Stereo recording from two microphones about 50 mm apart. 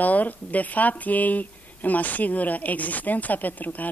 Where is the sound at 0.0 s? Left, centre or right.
Left.